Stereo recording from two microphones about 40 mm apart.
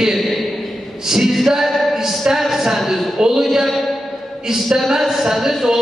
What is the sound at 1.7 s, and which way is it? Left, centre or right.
Music, centre.